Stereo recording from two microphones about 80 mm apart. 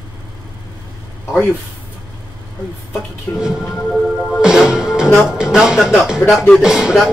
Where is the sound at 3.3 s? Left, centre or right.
Left.